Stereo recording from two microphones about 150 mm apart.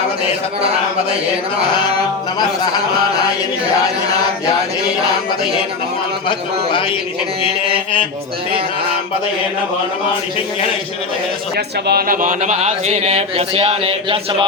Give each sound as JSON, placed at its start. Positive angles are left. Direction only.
{"t": 11.5, "sound": "speech", "side_deg": -90}